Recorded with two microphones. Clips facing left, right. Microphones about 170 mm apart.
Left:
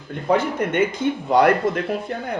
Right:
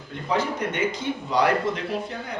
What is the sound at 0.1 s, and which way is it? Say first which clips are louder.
Speech: left 5 dB; 55° left (ahead or behind).